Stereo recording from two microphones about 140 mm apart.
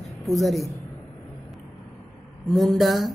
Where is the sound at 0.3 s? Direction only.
Centre (ahead or behind).